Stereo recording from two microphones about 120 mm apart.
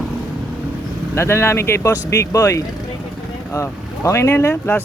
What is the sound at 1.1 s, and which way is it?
A man's voice, 20° left (ahead or behind).